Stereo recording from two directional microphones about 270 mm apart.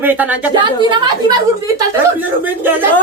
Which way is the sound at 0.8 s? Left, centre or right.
Centre.